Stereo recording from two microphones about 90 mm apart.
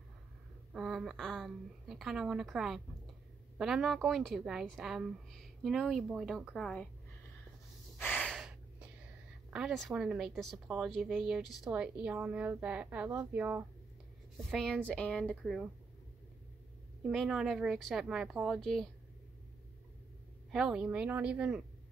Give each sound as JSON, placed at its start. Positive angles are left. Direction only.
{"t": 0.7, "sound": "a woman's voice", "side_deg": -5}
{"t": 8.0, "sound": "gasp", "side_deg": 15}
{"t": 8.3, "sound": "gasp", "side_deg": -5}
{"t": 9.5, "sound": "a woman's voice", "side_deg": -10}
{"t": 14.5, "sound": "a woman's voice", "side_deg": 5}
{"t": 17.0, "sound": "a woman's voice", "side_deg": 0}
{"t": 20.5, "sound": "speech", "side_deg": -10}